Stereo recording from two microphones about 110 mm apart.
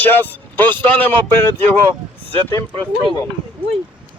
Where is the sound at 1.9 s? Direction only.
45° right (ahead or behind).